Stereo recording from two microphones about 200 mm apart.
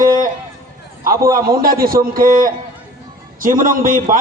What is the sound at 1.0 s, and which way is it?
A man's voice, 45° right (ahead or behind).